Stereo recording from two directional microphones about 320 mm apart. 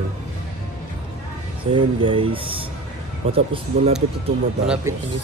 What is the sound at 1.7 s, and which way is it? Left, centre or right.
Speech, centre.